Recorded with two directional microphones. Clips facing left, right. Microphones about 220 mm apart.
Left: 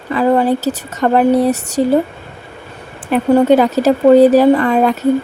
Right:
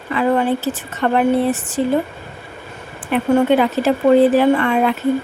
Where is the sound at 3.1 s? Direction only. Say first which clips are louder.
Left 4 dB; 40° left (ahead or behind).